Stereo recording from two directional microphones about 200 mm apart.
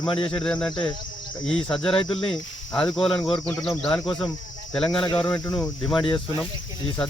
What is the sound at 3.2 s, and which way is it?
Speech, 20° left (ahead or behind).